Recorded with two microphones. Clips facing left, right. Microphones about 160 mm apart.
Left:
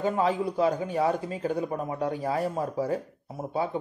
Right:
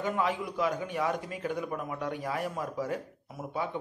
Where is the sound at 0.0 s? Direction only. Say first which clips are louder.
Left 5 dB; 30° left (ahead or behind).